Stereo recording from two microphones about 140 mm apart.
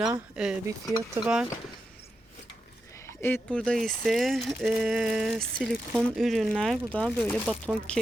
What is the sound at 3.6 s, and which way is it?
Speech, 5° left (ahead or behind).